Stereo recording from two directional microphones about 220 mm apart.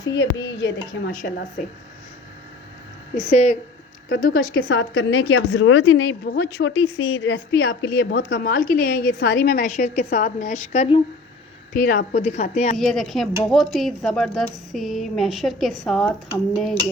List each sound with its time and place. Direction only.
0.0 s a woman's voice: 60° left (ahead or behind)
3.2 s a woman's voice: 35° left (ahead or behind)
4.5 s a woman's voice: 60° left (ahead or behind); by 11.0 s 30° left (ahead or behind)
11.7 s a woman's voice: 45° left (ahead or behind)
12.2 s a woman's voice: 30° left (ahead or behind)
12.7 s speech: centre (ahead or behind)